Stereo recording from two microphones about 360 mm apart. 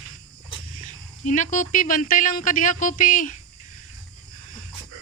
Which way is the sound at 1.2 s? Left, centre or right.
Left.